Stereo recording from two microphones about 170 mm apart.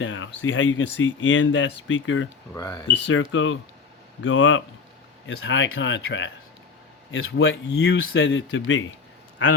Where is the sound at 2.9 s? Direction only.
90° left.